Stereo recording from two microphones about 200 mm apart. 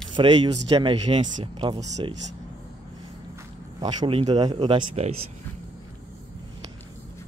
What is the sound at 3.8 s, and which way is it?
Speech, 25° right (ahead or behind).